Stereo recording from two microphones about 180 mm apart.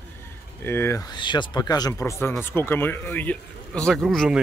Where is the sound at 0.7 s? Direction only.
15° left (ahead or behind).